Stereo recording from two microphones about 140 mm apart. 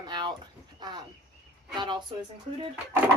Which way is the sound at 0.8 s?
30° right (ahead or behind).